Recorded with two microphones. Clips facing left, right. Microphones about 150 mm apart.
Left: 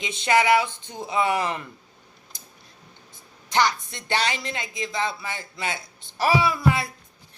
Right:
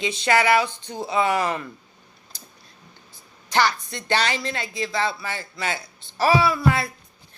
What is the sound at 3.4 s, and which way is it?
Speech, 20° left (ahead or behind).